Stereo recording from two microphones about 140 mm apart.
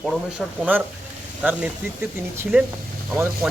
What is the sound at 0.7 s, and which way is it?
Speech, 10° right (ahead or behind).